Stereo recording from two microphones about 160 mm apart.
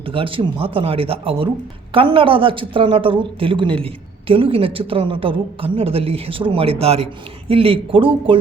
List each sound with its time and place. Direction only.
0.1 s a woman's voice: 35° right (ahead or behind)